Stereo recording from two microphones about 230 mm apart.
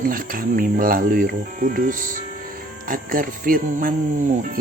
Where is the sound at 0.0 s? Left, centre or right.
Right.